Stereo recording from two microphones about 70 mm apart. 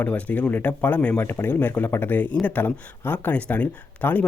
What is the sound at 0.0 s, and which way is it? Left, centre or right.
Speech, left.